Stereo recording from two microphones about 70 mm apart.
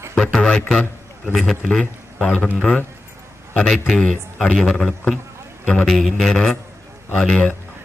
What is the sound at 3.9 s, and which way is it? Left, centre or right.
Speech, centre.